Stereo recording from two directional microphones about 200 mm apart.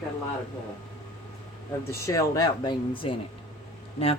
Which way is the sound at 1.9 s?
15° left (ahead or behind).